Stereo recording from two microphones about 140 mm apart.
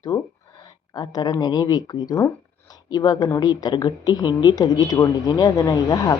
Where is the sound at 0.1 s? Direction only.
25° left (ahead or behind).